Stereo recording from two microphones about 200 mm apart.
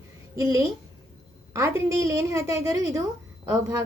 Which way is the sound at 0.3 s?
15° right (ahead or behind).